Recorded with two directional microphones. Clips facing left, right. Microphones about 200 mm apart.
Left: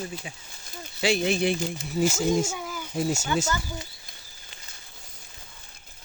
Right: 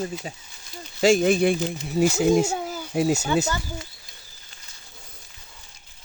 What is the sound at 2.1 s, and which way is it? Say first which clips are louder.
Speech: right 5 dB; 65° right (ahead or behind).